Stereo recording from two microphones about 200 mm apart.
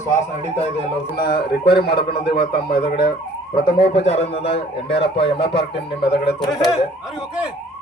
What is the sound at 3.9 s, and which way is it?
A man's voice, 30° left (ahead or behind).